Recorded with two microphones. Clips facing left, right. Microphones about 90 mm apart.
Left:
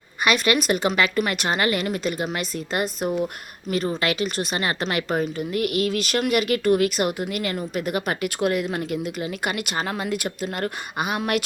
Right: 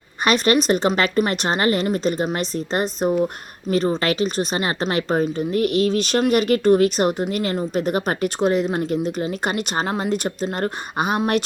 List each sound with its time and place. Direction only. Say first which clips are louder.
0.3 s a woman's voice: right 3 dB; 35° right (ahead or behind)
3.7 s a woman's voice: right 4 dB; 35° right (ahead or behind)